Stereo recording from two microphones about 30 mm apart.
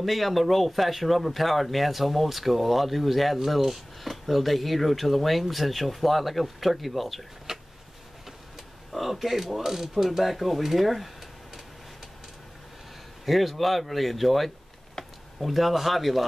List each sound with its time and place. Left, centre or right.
0.0 s speech: centre
7.5 s a sound: centre
8.9 s speech: centre
10.1 s speech: centre
13.2 s speech: centre